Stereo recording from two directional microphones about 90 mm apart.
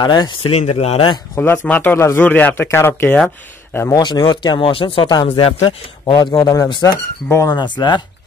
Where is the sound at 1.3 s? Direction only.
25° left (ahead or behind).